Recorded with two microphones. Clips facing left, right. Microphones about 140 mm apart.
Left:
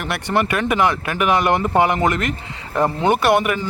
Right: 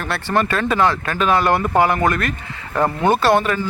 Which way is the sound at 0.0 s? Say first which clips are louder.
Even; 15° left (ahead or behind).